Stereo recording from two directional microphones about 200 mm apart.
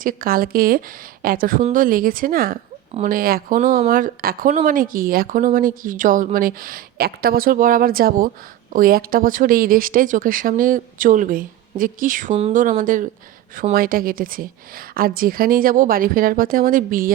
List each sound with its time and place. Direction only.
0.0 s speech: 45° right (ahead or behind)
12.3 s speech: 30° right (ahead or behind)